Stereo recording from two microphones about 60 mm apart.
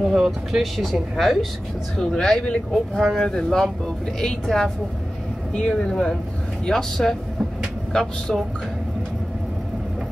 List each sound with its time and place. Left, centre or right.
0.0 s speech: centre